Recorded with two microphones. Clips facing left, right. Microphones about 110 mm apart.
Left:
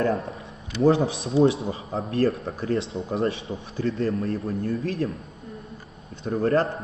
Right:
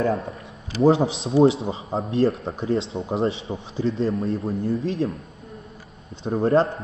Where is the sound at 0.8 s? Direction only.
25° right (ahead or behind).